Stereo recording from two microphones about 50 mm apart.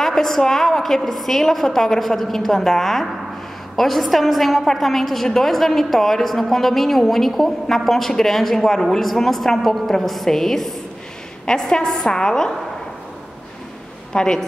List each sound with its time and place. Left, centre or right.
0.0 s a woman's voice: centre
14.1 s a woman's voice: centre